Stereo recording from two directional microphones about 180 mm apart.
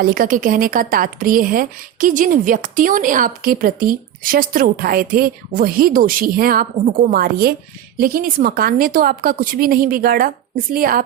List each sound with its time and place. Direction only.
0.0 s speech: 50° right (ahead or behind)